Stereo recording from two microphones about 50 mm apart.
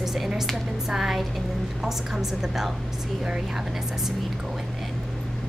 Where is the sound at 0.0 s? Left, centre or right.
Centre.